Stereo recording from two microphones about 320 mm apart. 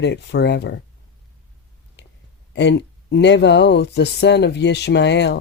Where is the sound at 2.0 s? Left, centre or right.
Left.